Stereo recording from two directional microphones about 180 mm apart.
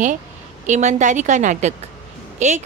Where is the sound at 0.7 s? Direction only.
40° right (ahead or behind).